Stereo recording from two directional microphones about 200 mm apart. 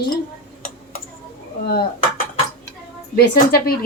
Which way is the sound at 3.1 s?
50° left (ahead or behind).